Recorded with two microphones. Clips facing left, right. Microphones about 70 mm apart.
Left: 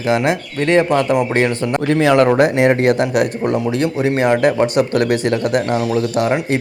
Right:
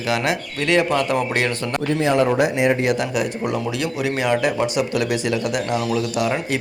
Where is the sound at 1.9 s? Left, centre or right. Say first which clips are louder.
Left 6 dB; left.